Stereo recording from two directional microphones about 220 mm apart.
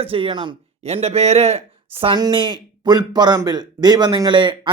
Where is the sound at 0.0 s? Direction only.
25° right (ahead or behind).